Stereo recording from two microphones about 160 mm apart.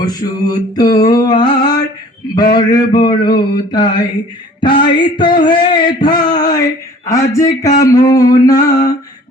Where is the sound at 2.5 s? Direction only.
25° left (ahead or behind).